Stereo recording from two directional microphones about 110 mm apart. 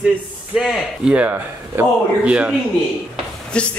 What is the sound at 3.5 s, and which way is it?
Speech, 10° left (ahead or behind).